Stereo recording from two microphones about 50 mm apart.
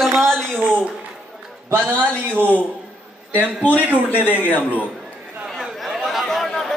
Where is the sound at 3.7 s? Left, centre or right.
Right.